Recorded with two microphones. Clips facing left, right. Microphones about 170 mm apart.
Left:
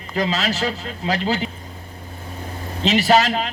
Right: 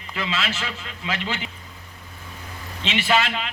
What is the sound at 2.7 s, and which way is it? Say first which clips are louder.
Speech: left 6 dB; 40° left (ahead or behind).